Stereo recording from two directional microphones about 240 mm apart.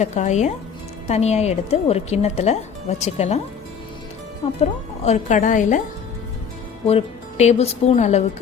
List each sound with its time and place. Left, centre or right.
0.0 s speech: left
4.6 s speech: left
6.8 s speech: left